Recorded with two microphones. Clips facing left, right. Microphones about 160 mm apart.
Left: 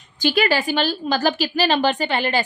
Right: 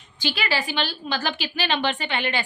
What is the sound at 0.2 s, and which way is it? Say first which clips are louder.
A woman's voice: left 7 dB; 45° left (ahead or behind).